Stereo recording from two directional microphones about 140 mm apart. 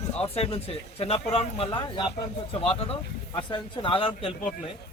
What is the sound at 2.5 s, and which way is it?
Speech, 45° left (ahead or behind).